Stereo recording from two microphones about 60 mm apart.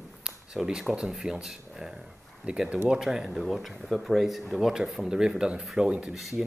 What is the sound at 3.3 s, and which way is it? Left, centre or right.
Speech, centre.